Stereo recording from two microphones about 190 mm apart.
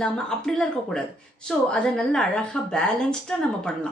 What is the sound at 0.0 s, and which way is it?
A woman's voice, 5° left (ahead or behind).